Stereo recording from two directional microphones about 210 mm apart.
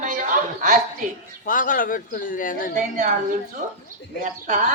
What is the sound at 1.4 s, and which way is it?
Speech, 40° left (ahead or behind).